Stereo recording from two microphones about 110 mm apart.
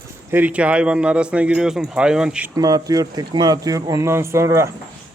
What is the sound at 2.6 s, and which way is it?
Speech, 35° right (ahead or behind).